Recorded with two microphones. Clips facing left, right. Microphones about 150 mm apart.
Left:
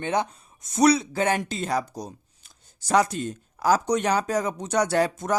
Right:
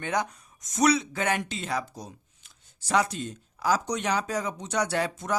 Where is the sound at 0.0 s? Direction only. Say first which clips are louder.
Left 3 dB; 25° left (ahead or behind).